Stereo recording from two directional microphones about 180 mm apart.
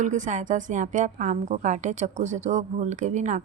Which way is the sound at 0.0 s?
45° right (ahead or behind).